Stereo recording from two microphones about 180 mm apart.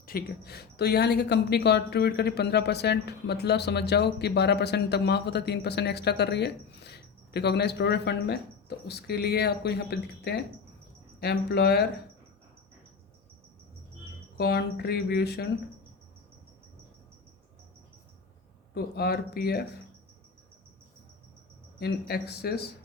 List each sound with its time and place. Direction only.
0.0 s speech: 55° left (ahead or behind)
14.3 s speech: 60° left (ahead or behind)
18.7 s speech: 60° left (ahead or behind)
21.8 s speech: 60° left (ahead or behind)